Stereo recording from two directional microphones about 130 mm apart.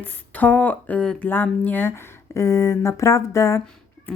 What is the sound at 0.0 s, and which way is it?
Speech, 15° left (ahead or behind).